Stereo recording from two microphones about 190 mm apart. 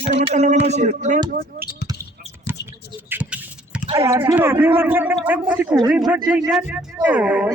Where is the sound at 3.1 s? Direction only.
10° right (ahead or behind).